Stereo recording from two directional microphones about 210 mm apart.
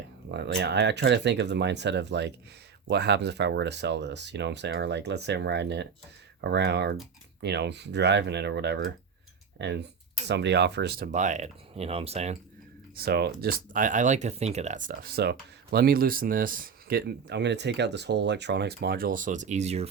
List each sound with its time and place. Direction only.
0.3 s speech: 55° right (ahead or behind)
11.1 s speech: 35° right (ahead or behind)
13.0 s speech: 50° right (ahead or behind); by 19.9 s 30° right (ahead or behind)